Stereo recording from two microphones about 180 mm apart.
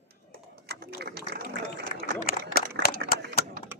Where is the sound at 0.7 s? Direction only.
60° right (ahead or behind).